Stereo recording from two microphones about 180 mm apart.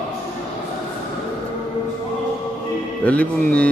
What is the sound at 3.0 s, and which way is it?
Speech, 5° left (ahead or behind).